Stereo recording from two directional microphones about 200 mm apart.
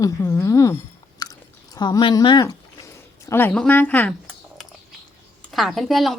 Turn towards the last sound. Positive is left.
turn(degrees=0)  # may be behind; listen again after turning